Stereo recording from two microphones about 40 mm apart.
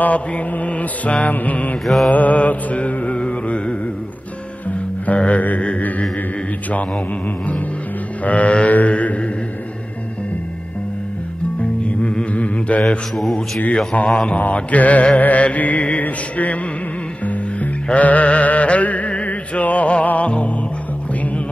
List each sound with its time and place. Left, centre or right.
0.0 s mantra: left
3.2 s music: left
8.2 s mantra: left
12.0 s mantra: left
13.1 s mantra: centre
13.9 s mantra: left
14.4 s mantra: left
17.2 s music: left
17.9 s chant: left
19.2 s music: left